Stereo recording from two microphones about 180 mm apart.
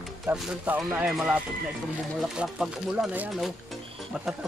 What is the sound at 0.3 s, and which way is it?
Speech, 10° right (ahead or behind).